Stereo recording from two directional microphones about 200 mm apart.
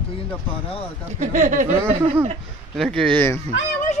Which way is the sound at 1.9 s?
30° right (ahead or behind).